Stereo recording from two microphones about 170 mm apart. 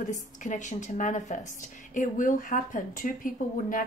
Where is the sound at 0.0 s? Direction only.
45° left (ahead or behind).